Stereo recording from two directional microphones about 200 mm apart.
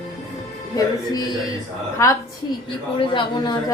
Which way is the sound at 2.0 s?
15° left (ahead or behind).